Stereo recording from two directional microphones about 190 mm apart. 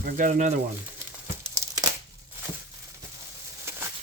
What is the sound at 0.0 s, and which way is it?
Speech, 45° right (ahead or behind).